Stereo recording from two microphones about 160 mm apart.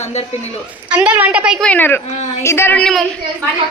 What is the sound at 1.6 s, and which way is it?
Speech, 10° left (ahead or behind).